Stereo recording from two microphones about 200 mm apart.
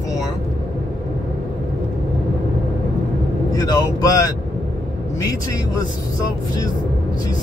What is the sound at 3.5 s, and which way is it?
Speech, 20° left (ahead or behind).